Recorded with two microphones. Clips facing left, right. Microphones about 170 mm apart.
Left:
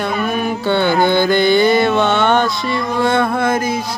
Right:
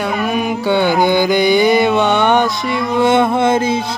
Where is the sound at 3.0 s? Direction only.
20° right (ahead or behind).